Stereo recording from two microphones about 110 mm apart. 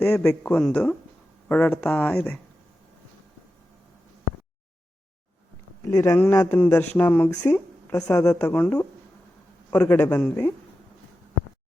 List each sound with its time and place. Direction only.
0.0 s a woman's voice: 20° left (ahead or behind)
5.8 s a woman's voice: 25° left (ahead or behind)
7.9 s speech: 30° left (ahead or behind)
8.4 s a woman's voice: 15° left (ahead or behind)